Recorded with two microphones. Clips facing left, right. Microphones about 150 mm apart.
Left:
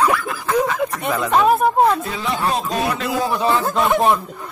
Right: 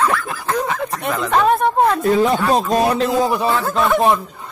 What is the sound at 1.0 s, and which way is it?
Speech, centre (ahead or behind).